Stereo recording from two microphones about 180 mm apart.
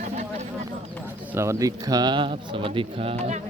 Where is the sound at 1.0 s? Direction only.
15° right (ahead or behind); by 3.4 s 40° right (ahead or behind).